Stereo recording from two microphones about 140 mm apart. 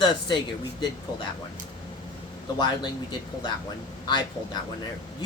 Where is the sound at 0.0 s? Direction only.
30° left (ahead or behind).